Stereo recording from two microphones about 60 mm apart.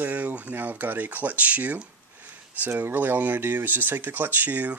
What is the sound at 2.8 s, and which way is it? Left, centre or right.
Speech, right.